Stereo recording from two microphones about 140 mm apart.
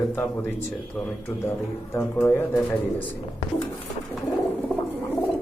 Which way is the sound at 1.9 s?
15° left (ahead or behind).